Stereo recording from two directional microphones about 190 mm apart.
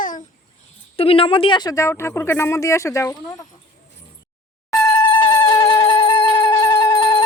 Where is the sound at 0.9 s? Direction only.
30° left (ahead or behind).